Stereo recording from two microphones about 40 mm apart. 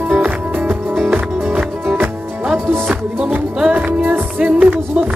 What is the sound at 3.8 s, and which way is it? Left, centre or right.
Music, right.